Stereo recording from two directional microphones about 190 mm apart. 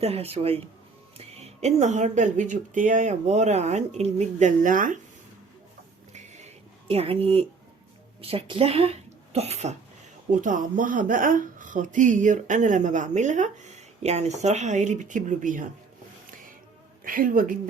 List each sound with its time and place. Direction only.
0.0 s speech: 30° right (ahead or behind)
6.1 s a sound: 35° right (ahead or behind)
8.2 s speech: 30° right (ahead or behind)
17.0 s a woman's voice: 45° right (ahead or behind)